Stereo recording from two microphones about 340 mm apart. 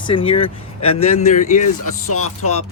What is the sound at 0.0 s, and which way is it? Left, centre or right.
Speech, centre.